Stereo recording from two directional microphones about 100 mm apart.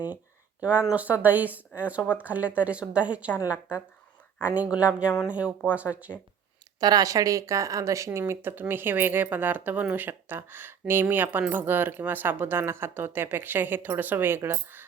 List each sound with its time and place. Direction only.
0.6 s speech: 15° right (ahead or behind)
4.4 s speech: 15° right (ahead or behind)
6.7 s speech: 40° right (ahead or behind); by 14.8 s 20° right (ahead or behind)